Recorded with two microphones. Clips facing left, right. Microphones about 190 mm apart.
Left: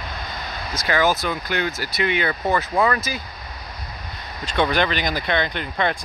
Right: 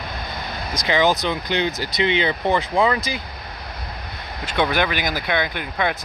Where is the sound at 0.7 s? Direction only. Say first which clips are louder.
Right 1 dB; 20° right (ahead or behind).